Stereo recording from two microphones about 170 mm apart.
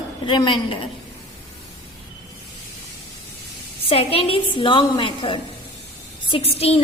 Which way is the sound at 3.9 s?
35° left (ahead or behind).